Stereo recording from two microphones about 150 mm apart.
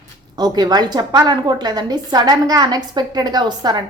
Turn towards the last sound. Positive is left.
turn(degrees=-30)  # may be behind; listen again after turning